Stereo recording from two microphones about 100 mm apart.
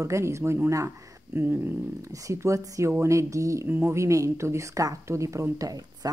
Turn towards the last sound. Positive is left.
turn(degrees=-35)  # may be behind; listen again after turning